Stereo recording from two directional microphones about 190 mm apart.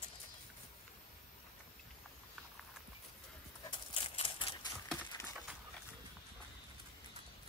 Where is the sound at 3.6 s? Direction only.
30° left (ahead or behind).